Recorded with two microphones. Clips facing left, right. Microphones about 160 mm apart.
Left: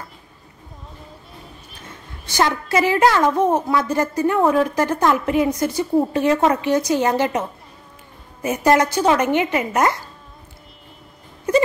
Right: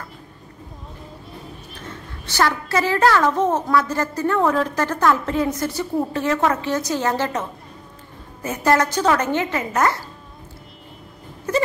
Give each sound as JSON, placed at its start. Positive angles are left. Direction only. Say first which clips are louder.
{"t": 2.2, "sound": "speech", "louder": "left 1 dB", "side_deg": 15}